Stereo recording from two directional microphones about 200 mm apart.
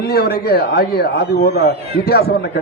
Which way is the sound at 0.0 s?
55° left (ahead or behind).